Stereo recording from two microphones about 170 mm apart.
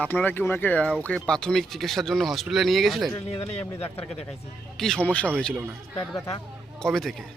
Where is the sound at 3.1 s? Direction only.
35° left (ahead or behind).